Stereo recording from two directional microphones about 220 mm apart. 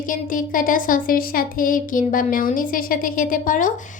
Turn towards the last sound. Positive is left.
turn(degrees=35)  # may be behind; listen again after turning